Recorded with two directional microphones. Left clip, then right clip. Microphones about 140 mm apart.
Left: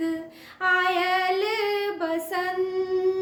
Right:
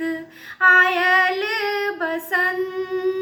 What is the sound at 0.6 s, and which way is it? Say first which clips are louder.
Female singing: right 8 dB; 45° left (ahead or behind).